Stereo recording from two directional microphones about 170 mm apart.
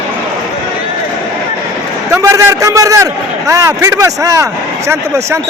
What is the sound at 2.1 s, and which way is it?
A man's voice, 15° right (ahead or behind).